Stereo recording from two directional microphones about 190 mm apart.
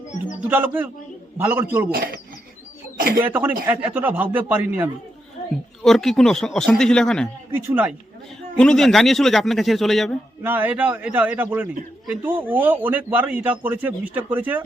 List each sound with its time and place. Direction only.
0.4 s a man's voice: 10° right (ahead or behind)
1.9 s speech: 45° right (ahead or behind)
3.2 s a man's voice: 10° right (ahead or behind)
7.5 s a man's voice: 10° right (ahead or behind)
8.5 s speech: 5° left (ahead or behind)
10.4 s a man's voice: 10° right (ahead or behind)